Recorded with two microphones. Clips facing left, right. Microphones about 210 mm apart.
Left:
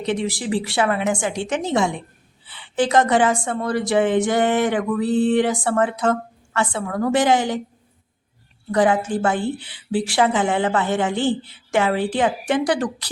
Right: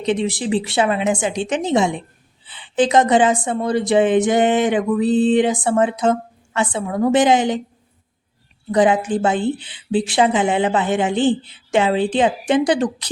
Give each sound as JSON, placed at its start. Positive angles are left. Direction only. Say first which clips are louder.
{"t": 0.0, "sound": "a woman's voice", "louder": "right 3 dB", "side_deg": -20}
{"t": 8.7, "sound": "a woman's voice", "louder": "right 2 dB", "side_deg": -20}